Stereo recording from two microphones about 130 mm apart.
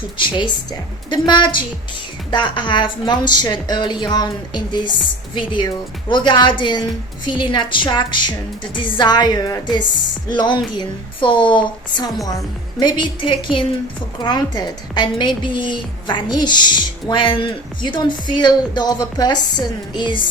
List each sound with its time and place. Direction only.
0.3 s a woman's voice: 40° left (ahead or behind)